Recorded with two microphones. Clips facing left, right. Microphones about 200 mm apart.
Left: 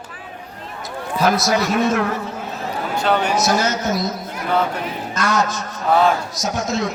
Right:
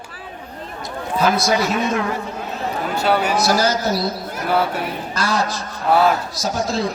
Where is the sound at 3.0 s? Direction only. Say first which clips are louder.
Even; 10° right (ahead or behind).